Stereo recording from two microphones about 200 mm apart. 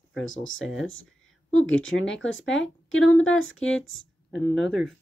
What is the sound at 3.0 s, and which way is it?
Speech, 85° left.